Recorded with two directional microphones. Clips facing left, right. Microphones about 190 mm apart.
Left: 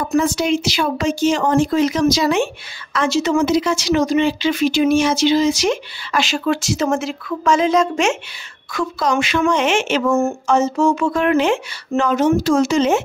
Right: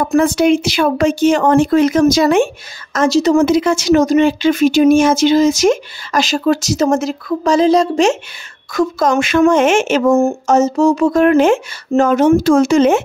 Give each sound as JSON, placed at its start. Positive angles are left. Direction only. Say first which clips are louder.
{"t": 0.0, "sound": "speech", "louder": "right 5 dB", "side_deg": -60}
{"t": 3.4, "sound": "speech", "louder": "right 4 dB", "side_deg": -55}
{"t": 8.7, "sound": "speech", "louder": "right 5 dB", "side_deg": -45}